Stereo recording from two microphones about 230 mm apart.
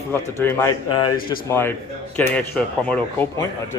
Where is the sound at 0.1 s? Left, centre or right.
Centre.